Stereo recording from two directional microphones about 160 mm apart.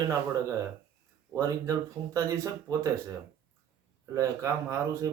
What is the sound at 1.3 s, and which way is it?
Speech, 20° right (ahead or behind).